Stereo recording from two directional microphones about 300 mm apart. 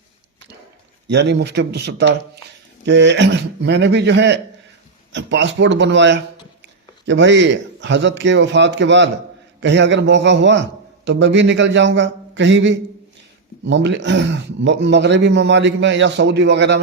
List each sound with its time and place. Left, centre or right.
1.0 s a man's voice: right